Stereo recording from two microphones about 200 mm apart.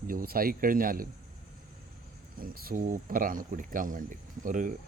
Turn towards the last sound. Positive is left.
turn(degrees=-40)  # may be behind; listen again after turning